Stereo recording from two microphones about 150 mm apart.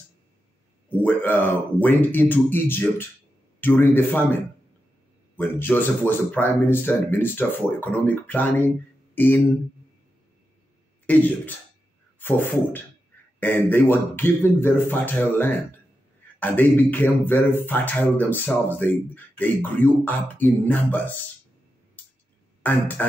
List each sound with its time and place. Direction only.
0.8 s speech: 10° left (ahead or behind)
11.1 s speech: 10° left (ahead or behind)
22.6 s speech: 10° left (ahead or behind)